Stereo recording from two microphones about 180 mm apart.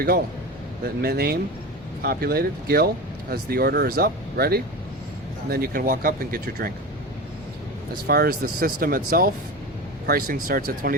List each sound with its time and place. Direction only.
1.0 s speech: 60° right (ahead or behind)
8.0 s speech: 55° right (ahead or behind)